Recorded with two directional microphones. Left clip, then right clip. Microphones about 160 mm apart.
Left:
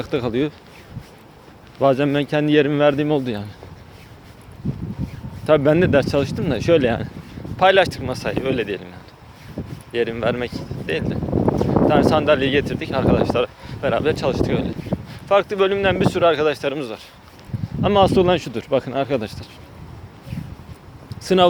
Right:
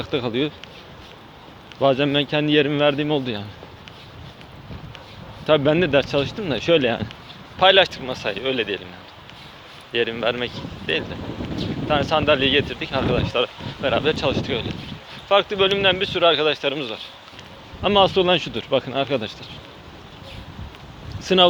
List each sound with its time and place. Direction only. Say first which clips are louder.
0.0 s speech: left 1 dB; 40° left (ahead or behind)
1.8 s speech: left 1 dB; 45° left (ahead or behind); by 3.2 s 60° left (ahead or behind)
5.5 s speech: left 2 dB; 45° left (ahead or behind)
9.9 s speech: left 1 dB; 40° left (ahead or behind)
21.2 s a sound: even; 35° left (ahead or behind)